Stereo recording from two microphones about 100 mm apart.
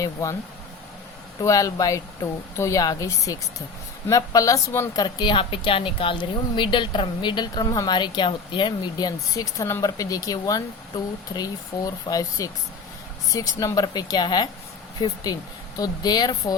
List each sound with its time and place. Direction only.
0.0 s speech: 35° left (ahead or behind)
1.4 s a woman's voice: 35° left (ahead or behind)
5.0 s a woman's voice: 45° left (ahead or behind)